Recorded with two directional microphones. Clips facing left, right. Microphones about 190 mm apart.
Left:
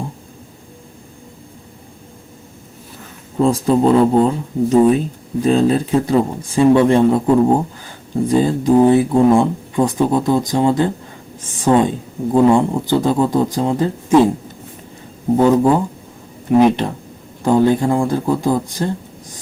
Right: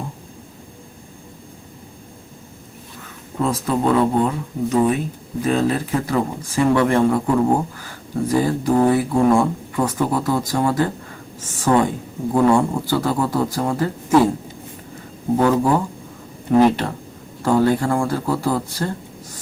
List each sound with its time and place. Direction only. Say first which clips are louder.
3.3 s speech: left 6 dB; 30° left (ahead or behind)
15.4 s speech: left 4 dB; 20° left (ahead or behind)